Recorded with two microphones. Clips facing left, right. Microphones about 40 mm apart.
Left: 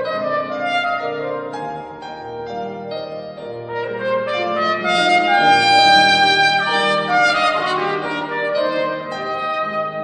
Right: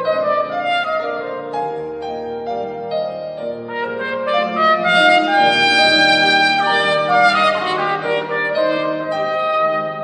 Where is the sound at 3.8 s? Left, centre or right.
Right.